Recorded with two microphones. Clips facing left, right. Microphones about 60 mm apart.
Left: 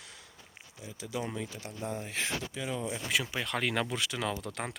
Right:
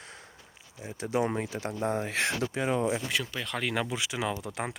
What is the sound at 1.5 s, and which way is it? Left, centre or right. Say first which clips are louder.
Speech: right 9 dB; right.